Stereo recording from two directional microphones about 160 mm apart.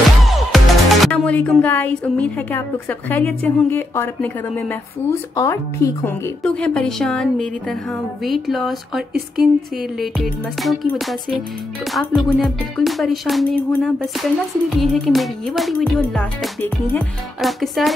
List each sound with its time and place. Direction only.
0.2 s music: centre (ahead or behind)
1.1 s a woman's voice: 10° left (ahead or behind)
6.4 s a woman's voice: 5° left (ahead or behind)